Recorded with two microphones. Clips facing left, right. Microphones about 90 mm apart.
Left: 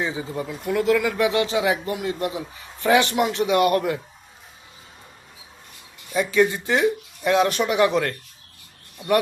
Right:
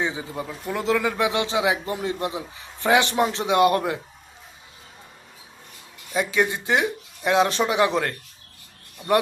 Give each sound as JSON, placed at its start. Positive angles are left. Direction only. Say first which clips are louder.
{"t": 0.0, "sound": "speech", "louder": "left 1 dB", "side_deg": -20}
{"t": 6.1, "sound": "speech", "louder": "left 3 dB", "side_deg": -15}